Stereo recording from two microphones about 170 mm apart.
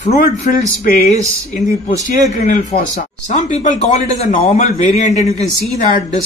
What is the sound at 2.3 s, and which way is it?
Speech, 50° left (ahead or behind).